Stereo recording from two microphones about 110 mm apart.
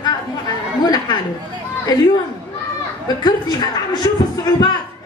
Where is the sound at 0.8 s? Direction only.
35° left (ahead or behind).